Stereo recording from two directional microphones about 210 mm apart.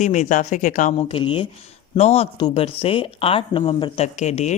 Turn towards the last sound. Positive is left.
turn(degrees=35)  # may be behind; listen again after turning